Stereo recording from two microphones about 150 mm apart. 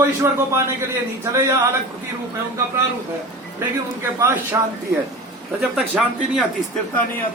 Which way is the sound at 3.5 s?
20° right (ahead or behind).